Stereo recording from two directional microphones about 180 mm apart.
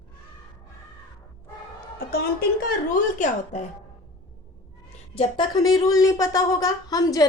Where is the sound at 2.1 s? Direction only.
60° left (ahead or behind).